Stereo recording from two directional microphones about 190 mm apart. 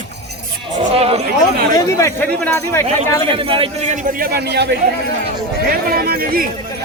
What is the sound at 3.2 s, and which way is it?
A man's voice, 30° right (ahead or behind).